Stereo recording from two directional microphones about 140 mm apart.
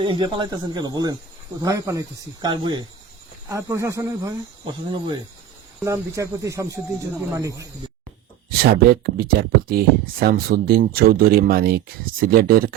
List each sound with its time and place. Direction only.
0.0 s speech: 35° right (ahead or behind)
3.5 s speech: 20° right (ahead or behind)
5.8 s speech: 20° right (ahead or behind)
8.4 s speech: 90° right